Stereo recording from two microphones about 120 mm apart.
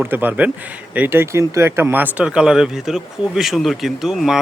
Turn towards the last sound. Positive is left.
turn(degrees=-5)  # may be behind; listen again after turning